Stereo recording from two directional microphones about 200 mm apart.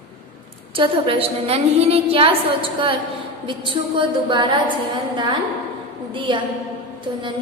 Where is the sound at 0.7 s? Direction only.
25° right (ahead or behind).